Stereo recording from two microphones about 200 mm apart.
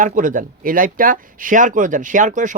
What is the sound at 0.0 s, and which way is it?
Speech, 40° right (ahead or behind).